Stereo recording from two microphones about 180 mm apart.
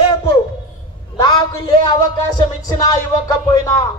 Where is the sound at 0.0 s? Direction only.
20° left (ahead or behind).